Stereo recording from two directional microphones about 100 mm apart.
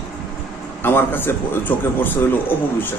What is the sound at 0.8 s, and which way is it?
A man's voice, 20° left (ahead or behind).